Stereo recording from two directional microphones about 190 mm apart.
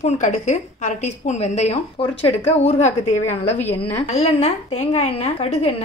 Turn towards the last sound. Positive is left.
turn(degrees=35)  # may be behind; listen again after turning